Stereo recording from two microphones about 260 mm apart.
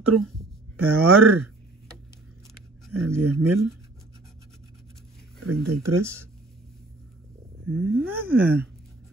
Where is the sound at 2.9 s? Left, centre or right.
Right.